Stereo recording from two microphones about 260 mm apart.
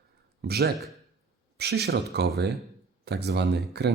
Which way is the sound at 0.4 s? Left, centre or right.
Right.